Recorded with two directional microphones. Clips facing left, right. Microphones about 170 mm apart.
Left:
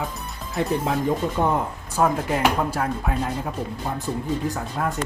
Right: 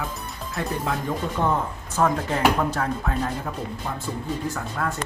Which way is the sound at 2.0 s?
10° left (ahead or behind).